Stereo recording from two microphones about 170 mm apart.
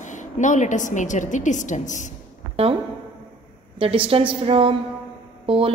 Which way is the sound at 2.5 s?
35° right (ahead or behind).